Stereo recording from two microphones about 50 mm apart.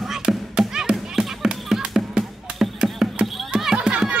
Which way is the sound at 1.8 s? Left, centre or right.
Centre.